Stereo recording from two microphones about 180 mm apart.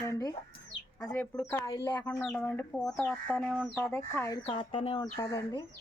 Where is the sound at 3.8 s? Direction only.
15° left (ahead or behind).